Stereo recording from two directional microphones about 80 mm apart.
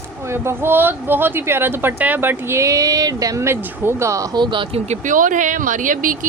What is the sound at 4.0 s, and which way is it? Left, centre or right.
Speech, right.